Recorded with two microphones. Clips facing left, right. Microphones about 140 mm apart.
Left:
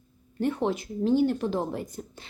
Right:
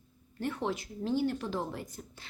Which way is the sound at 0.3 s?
20° left (ahead or behind).